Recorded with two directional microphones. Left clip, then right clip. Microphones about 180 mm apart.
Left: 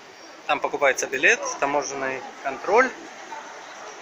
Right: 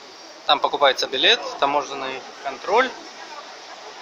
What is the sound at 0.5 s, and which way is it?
Speech, 5° right (ahead or behind).